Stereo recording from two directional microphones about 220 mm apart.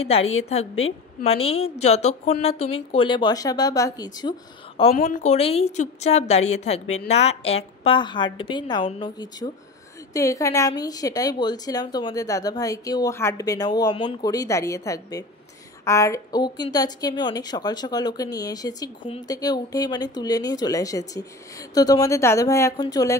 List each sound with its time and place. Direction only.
0.0 s a woman's voice: 30° left (ahead or behind)